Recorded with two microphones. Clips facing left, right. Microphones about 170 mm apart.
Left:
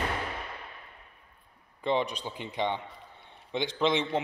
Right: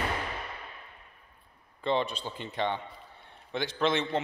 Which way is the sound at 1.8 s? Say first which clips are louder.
Even; 15° left (ahead or behind).